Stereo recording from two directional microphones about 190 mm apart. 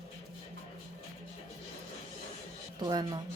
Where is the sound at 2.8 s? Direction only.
20° right (ahead or behind).